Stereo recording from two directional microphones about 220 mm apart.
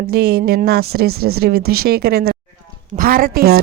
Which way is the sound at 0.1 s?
45° right (ahead or behind).